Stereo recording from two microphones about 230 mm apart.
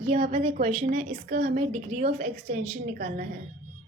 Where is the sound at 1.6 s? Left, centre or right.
Right.